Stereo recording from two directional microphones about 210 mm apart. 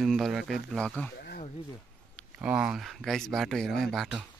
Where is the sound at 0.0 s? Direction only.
Centre (ahead or behind).